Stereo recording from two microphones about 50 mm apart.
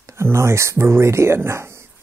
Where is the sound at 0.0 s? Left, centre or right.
Right.